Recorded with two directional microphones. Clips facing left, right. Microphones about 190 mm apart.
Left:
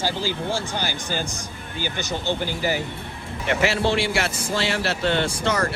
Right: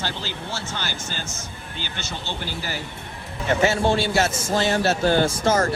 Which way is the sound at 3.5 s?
75° left (ahead or behind).